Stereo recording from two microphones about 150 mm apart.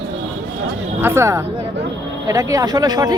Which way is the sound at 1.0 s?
15° right (ahead or behind).